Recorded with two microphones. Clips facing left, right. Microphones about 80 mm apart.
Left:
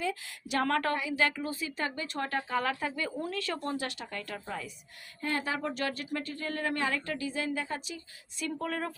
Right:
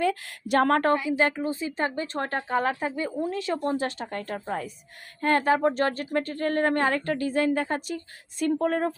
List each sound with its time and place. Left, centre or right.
0.0 s speech: right